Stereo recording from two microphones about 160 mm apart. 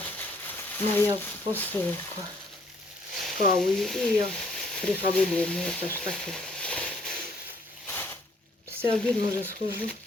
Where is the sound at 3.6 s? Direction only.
Centre (ahead or behind).